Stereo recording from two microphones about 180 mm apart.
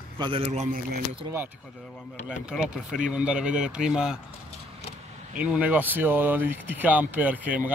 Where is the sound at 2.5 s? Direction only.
5° right (ahead or behind).